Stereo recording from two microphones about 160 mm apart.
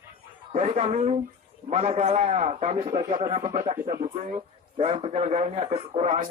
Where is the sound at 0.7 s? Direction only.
45° right (ahead or behind).